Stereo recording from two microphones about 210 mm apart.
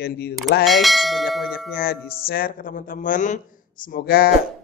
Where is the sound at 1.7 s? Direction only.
45° left (ahead or behind).